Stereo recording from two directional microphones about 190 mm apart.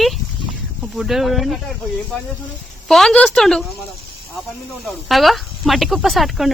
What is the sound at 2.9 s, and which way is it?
Speech, centre (ahead or behind).